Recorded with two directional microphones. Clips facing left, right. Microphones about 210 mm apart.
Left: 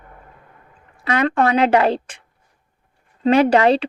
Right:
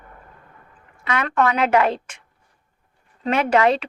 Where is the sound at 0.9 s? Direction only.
30° left (ahead or behind).